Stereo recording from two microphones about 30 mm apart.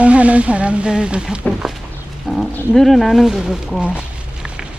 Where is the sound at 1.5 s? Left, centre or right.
Left.